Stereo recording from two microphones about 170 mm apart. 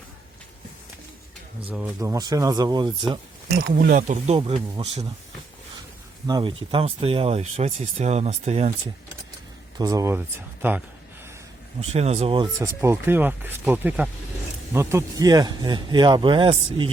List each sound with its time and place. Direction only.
1.6 s speech: 5° right (ahead or behind)
2.0 s speech: 20° right (ahead or behind)
3.7 s speech: 55° right (ahead or behind)
4.4 s speech: 35° right (ahead or behind)
6.2 s speech: 25° right (ahead or behind)
9.7 s speech: 20° right (ahead or behind)
11.8 s speech: 40° right (ahead or behind)
12.6 s speech: 15° right (ahead or behind); by 16.9 s 30° right (ahead or behind)